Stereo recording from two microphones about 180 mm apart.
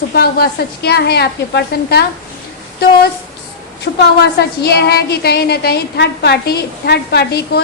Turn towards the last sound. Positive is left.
turn(degrees=65)  # may be behind; listen again after turning